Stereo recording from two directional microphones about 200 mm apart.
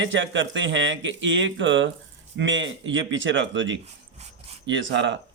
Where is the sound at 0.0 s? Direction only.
65° right (ahead or behind).